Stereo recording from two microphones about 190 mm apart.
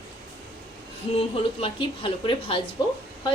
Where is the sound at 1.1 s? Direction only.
30° left (ahead or behind).